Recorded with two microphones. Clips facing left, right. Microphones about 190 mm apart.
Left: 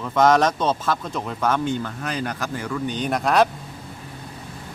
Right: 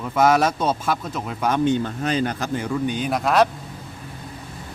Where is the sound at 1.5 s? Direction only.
20° right (ahead or behind).